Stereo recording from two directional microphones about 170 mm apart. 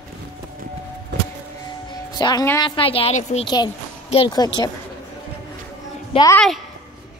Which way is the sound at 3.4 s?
25° left (ahead or behind).